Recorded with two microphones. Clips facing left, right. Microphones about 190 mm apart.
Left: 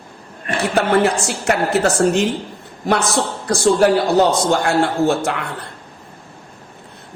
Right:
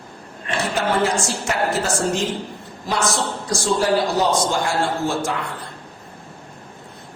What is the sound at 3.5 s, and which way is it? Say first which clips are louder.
A woman's voice: left 6 dB; 60° left (ahead or behind).